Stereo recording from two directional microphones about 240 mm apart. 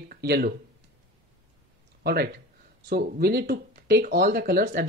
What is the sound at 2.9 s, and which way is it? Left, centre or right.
Speech, right.